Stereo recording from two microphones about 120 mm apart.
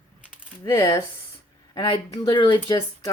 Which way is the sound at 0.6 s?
30° left (ahead or behind).